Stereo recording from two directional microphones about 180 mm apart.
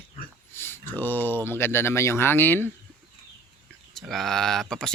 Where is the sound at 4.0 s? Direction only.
Centre (ahead or behind).